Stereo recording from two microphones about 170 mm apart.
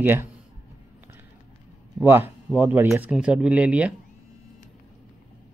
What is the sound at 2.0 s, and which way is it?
Speech, 15° right (ahead or behind).